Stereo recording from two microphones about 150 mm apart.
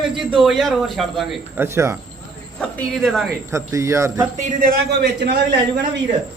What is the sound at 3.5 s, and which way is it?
Speech, 20° right (ahead or behind).